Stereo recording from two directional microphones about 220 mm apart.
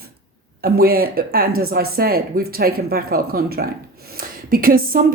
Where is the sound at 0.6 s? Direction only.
45° right (ahead or behind).